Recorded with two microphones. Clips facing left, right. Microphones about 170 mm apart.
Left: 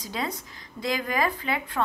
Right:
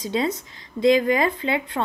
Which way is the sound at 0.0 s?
25° right (ahead or behind).